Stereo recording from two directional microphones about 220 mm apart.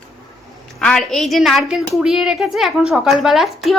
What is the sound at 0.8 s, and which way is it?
A woman's voice, centre (ahead or behind).